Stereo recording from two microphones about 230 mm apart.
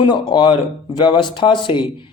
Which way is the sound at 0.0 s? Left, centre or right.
Centre.